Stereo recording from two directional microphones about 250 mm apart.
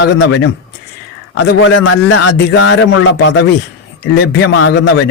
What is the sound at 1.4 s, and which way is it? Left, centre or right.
Speech, left.